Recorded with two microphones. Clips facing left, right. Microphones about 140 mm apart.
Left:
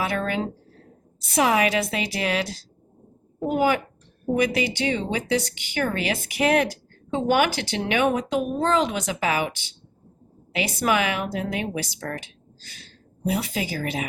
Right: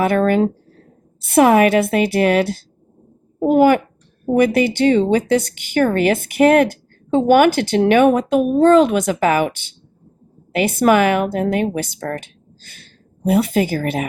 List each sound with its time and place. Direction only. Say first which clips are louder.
0.0 s a woman's voice: right 11 dB; 50° right (ahead or behind)